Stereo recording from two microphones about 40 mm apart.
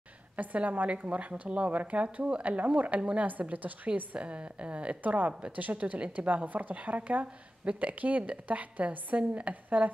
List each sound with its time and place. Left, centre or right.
0.4 s a woman's voice: right
3.3 s a woman's voice: right
5.0 s a woman's voice: right